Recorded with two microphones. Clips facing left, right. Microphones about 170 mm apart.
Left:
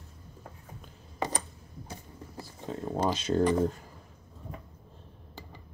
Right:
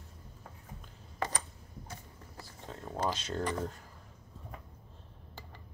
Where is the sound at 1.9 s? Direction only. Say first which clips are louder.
Left 7 dB; 20° left (ahead or behind).